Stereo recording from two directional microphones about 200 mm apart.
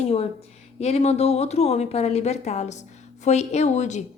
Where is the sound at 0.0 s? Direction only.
30° left (ahead or behind).